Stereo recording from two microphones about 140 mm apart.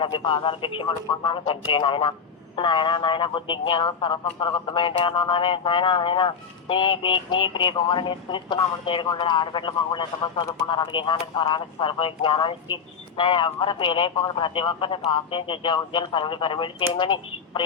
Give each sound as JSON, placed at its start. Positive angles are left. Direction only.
{"t": 0.2, "sound": "speech", "side_deg": 35}